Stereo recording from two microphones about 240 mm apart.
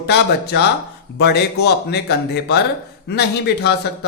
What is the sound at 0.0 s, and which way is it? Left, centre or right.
Speech, left.